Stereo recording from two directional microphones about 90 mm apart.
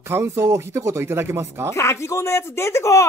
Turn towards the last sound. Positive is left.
turn(degrees=35)  # may be behind; listen again after turning